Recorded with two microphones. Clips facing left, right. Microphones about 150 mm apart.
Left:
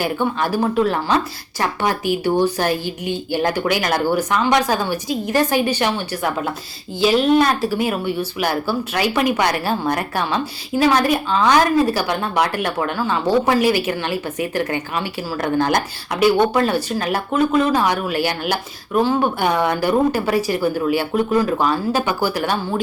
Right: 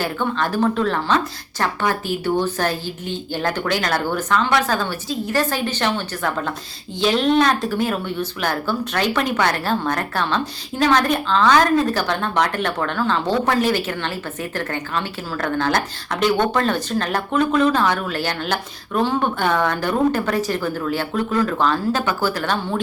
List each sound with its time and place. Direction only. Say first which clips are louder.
0.0 s a woman's voice: left 2 dB; 10° left (ahead or behind)